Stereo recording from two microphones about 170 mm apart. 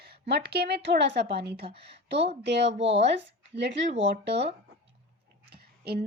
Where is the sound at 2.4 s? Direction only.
90° right.